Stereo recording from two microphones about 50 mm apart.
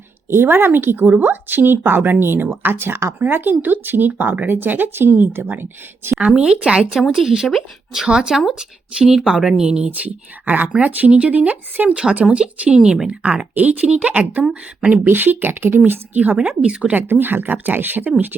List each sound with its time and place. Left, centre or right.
0.3 s speech: right
6.3 s speech: centre
7.1 s speech: centre
8.0 s speech: centre
9.9 s speech: right
13.1 s speech: right
13.8 s speech: right
15.0 s speech: right
15.9 s speech: right
16.9 s speech: right